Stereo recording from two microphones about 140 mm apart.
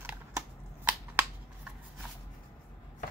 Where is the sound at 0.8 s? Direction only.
15° right (ahead or behind).